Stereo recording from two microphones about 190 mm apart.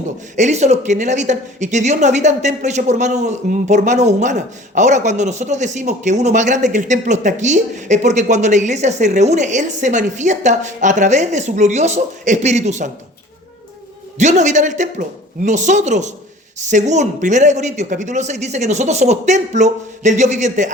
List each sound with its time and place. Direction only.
0.3 s a woman's voice: 40° right (ahead or behind)
14.2 s a woman's voice: 40° right (ahead or behind)